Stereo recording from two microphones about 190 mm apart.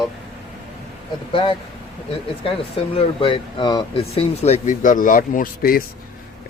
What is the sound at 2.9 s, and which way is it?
Speech, 30° left (ahead or behind).